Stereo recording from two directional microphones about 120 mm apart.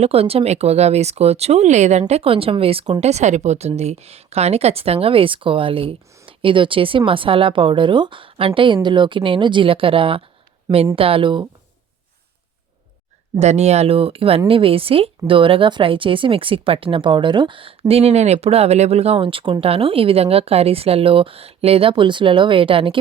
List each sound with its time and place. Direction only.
0.0 s speech: 55° right (ahead or behind)
3.0 s speech: 70° right (ahead or behind); by 11.4 s 45° right (ahead or behind)
13.4 s speech: 70° right (ahead or behind); by 23.0 s 50° right (ahead or behind)